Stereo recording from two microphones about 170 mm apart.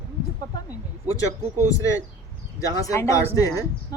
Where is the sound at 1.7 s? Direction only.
20° left (ahead or behind).